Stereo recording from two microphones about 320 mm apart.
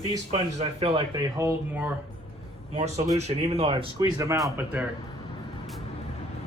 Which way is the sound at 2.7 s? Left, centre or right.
Right.